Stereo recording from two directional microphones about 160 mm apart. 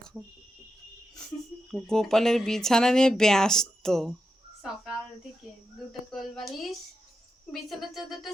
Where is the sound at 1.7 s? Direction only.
5° left (ahead or behind).